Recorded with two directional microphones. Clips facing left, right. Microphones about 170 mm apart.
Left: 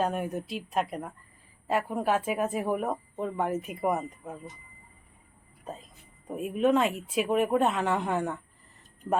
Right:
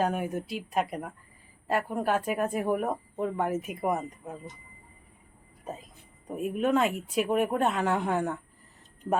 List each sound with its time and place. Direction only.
0.0 s speech: 5° right (ahead or behind)
6.2 s speech: centre (ahead or behind)